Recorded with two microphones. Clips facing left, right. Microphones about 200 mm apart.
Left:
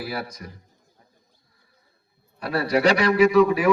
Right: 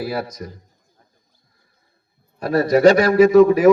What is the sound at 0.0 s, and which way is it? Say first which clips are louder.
Speech: right 6 dB; 40° right (ahead or behind).